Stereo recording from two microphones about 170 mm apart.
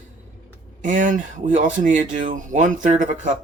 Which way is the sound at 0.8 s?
50° right (ahead or behind).